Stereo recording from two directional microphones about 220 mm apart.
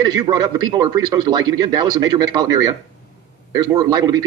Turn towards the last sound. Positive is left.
turn(degrees=-15)  # may be behind; listen again after turning